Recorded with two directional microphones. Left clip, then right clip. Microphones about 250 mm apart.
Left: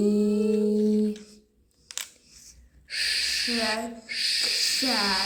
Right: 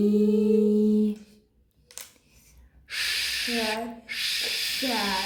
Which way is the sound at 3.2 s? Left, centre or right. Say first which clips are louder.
Left 1 dB; right.